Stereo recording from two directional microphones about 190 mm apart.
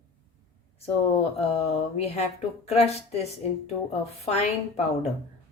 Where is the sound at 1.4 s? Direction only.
35° left (ahead or behind).